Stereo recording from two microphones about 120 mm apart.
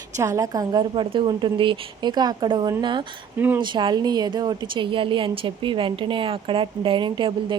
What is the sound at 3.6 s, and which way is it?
A woman's voice, 40° right (ahead or behind).